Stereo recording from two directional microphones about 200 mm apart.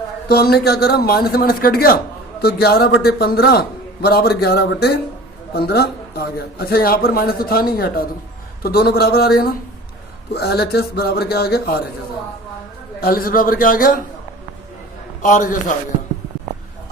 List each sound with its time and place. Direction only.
0.3 s a man's voice: 50° left (ahead or behind)
13.0 s a man's voice: 45° left (ahead or behind)
15.2 s a man's voice: 40° left (ahead or behind)